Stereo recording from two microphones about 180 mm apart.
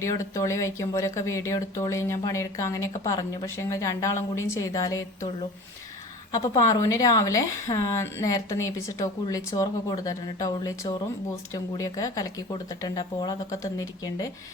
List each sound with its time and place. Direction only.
0.0 s speech: 15° left (ahead or behind)
6.3 s a woman's voice: 20° left (ahead or behind)